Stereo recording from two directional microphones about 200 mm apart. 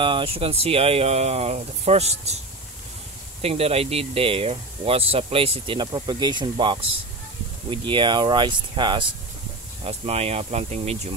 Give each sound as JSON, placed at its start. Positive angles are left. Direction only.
{"t": 0.0, "sound": "speech", "side_deg": -25}
{"t": 3.4, "sound": "speech", "side_deg": -30}